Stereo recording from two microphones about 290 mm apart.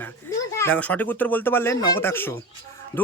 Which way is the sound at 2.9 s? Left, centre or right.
Centre.